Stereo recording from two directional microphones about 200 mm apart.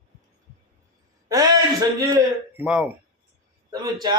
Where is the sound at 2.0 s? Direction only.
15° right (ahead or behind).